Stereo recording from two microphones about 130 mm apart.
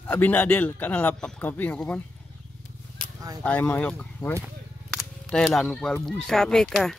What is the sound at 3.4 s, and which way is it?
Speech, 15° left (ahead or behind).